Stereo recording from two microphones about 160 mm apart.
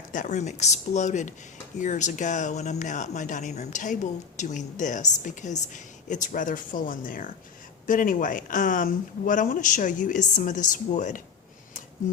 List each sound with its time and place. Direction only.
0.1 s speech: 50° left (ahead or behind)